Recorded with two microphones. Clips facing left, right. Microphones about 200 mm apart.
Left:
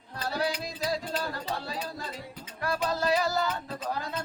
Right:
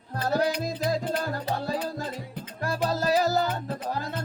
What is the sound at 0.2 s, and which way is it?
Music, 45° right (ahead or behind).